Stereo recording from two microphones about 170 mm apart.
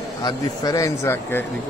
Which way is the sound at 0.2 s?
20° left (ahead or behind).